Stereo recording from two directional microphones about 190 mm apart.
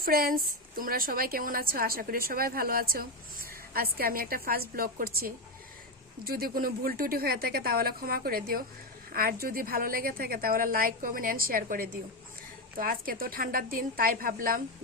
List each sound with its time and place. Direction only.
0.0 s a woman's voice: 50° right (ahead or behind)